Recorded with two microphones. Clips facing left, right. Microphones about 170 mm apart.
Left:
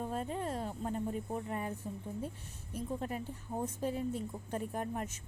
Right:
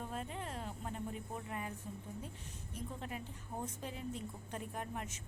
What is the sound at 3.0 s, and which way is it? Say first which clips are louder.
A woman's voice: left 6 dB; 40° left (ahead or behind).